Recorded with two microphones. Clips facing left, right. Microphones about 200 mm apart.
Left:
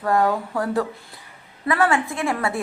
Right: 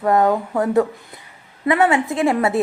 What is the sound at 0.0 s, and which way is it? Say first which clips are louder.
A woman's voice: right 4 dB; 20° right (ahead or behind).